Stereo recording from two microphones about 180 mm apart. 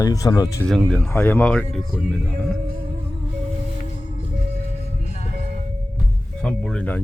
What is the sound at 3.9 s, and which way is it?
Music, 40° left (ahead or behind).